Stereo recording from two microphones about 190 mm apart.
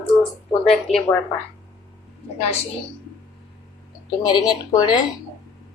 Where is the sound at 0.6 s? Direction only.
Centre (ahead or behind).